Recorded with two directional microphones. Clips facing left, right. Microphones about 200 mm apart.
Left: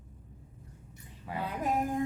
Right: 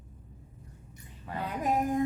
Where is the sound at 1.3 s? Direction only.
10° left (ahead or behind).